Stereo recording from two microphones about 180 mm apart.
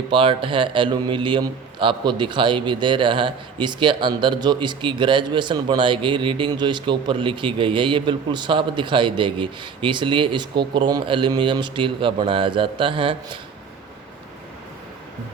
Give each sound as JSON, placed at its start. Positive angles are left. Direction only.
{"t": 0.1, "sound": "a man's voice", "side_deg": -30}